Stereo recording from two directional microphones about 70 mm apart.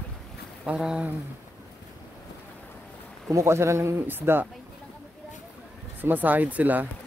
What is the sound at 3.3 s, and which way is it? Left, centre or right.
A man's voice, right.